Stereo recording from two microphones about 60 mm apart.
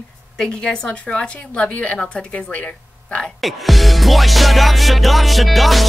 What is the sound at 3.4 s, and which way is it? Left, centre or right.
Music, centre.